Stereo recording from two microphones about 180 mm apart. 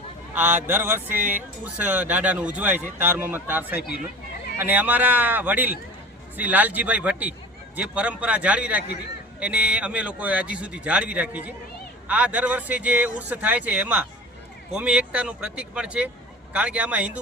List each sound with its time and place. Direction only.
0.3 s a man's voice: 10° right (ahead or behind)
3.8 s speech: 60° left (ahead or behind)
4.6 s a man's voice: 10° right (ahead or behind)